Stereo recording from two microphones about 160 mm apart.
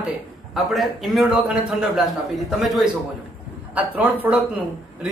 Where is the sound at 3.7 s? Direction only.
10° right (ahead or behind).